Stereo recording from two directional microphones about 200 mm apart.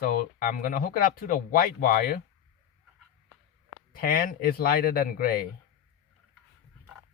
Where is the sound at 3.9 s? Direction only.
45° left (ahead or behind).